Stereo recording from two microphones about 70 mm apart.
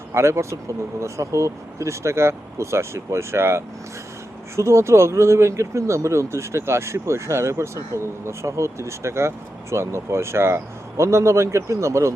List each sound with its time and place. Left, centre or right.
0.1 s speech: right